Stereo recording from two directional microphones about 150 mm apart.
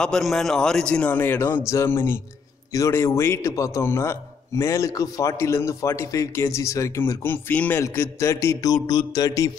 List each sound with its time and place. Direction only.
0.0 s a man's voice: 5° left (ahead or behind); by 9.5 s 25° left (ahead or behind)